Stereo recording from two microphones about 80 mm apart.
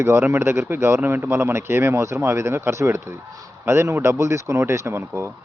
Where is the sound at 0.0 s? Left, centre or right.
Right.